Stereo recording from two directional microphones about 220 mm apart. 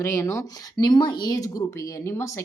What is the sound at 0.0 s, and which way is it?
Speech, 10° left (ahead or behind).